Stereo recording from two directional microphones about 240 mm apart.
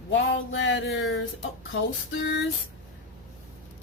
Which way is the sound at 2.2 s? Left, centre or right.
Left.